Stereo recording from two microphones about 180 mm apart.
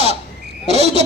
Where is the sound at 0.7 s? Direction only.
35° right (ahead or behind).